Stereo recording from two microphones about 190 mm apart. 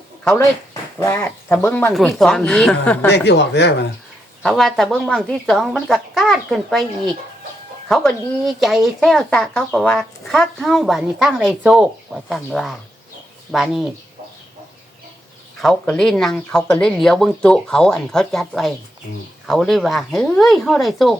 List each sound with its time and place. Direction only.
0.3 s speech: 15° left (ahead or behind)
3.1 s speech: 65° left (ahead or behind)
4.4 s speech: centre (ahead or behind)
15.6 s speech: centre (ahead or behind)